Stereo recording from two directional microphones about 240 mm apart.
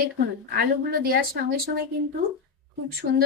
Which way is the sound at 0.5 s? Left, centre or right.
Right.